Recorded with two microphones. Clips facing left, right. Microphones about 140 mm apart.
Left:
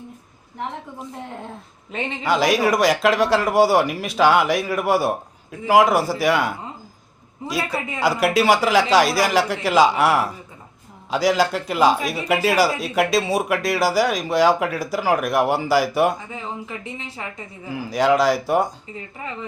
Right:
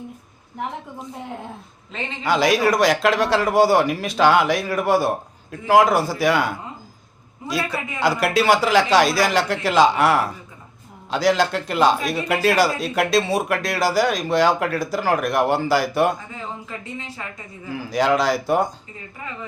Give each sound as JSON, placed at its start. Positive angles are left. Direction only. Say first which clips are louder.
{"t": 2.2, "sound": "speech", "louder": "right 1 dB", "side_deg": 0}
{"t": 7.9, "sound": "speech", "louder": "left 1 dB", "side_deg": 0}
{"t": 16.3, "sound": "speech", "louder": "left 2 dB", "side_deg": 20}
{"t": 17.7, "sound": "speech", "louder": "left 1 dB", "side_deg": 5}